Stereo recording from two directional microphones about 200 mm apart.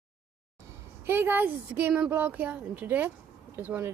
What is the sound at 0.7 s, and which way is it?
Speech, 10° right (ahead or behind).